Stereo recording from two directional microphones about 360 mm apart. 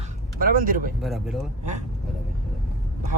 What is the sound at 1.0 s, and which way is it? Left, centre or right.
Speech, centre.